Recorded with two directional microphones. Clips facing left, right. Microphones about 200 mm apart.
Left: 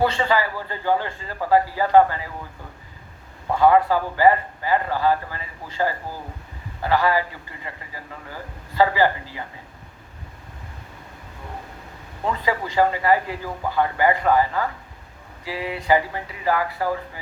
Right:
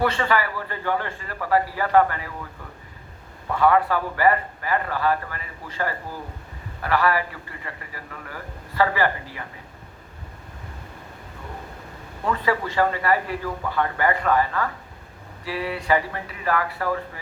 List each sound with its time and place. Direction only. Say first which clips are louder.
0.0 s a man's voice: left 2 dB; 25° left (ahead or behind)
3.5 s a man's voice: left 3 dB; 30° left (ahead or behind)
12.2 s a man's voice: right 1 dB; 25° left (ahead or behind)